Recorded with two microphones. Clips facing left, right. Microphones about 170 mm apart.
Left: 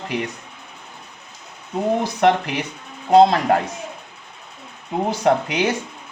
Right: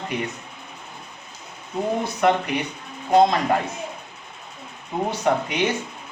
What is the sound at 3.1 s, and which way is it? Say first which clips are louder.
Speech: left 4 dB; 70° left (ahead or behind).